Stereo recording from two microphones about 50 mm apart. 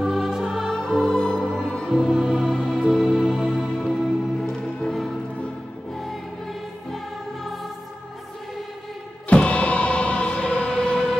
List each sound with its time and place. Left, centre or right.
0.0 s music: centre
0.7 s music: centre
1.9 s music: centre
3.2 s music: centre
4.4 s music: centre
9.3 s music: left